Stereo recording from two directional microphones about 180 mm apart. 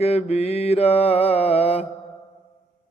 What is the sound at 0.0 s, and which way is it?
Mantra, 35° left (ahead or behind).